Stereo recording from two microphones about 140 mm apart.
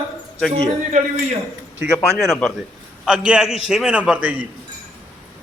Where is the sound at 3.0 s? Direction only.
5° right (ahead or behind).